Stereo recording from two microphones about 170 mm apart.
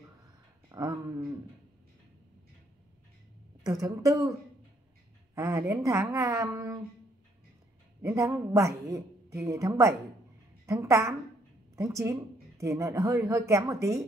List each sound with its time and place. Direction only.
0.7 s a woman's voice: 20° right (ahead or behind)
3.6 s a woman's voice: 20° right (ahead or behind)
8.0 s speech: 15° right (ahead or behind)